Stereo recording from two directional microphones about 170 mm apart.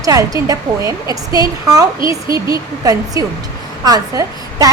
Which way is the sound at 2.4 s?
20° right (ahead or behind).